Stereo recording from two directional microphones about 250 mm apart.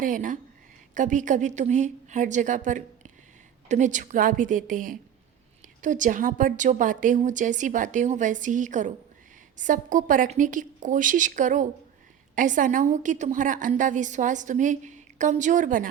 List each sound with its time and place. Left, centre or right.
0.0 s a woman's voice: right